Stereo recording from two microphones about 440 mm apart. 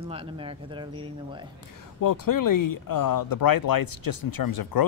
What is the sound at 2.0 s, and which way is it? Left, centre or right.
Speech, left.